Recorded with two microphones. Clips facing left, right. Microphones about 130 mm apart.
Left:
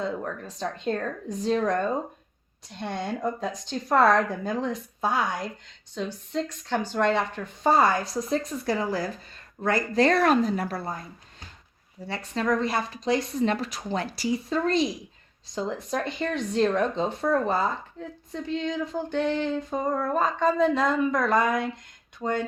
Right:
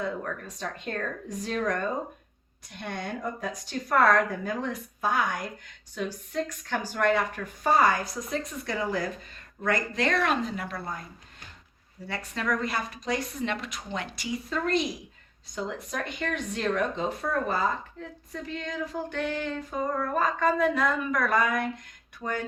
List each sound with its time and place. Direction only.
0.0 s female singing: 25° left (ahead or behind)
2.8 s female singing: 25° left (ahead or behind)
9.6 s speech: 30° left (ahead or behind)
12.0 s speech: 30° left (ahead or behind)
15.5 s female singing: 30° left (ahead or behind)